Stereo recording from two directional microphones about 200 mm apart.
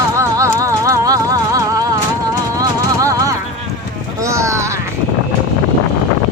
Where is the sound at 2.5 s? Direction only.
15° right (ahead or behind).